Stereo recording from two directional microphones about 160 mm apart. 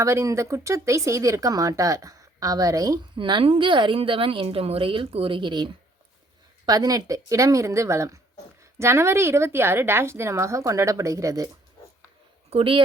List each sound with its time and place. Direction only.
0.0 s a woman's voice: 20° right (ahead or behind)
12.5 s speech: 35° right (ahead or behind)